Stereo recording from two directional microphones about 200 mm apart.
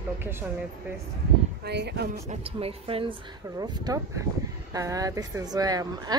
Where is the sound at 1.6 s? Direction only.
55° right (ahead or behind).